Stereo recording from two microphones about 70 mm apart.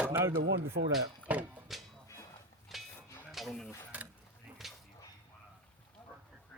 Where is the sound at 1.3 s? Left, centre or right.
Right.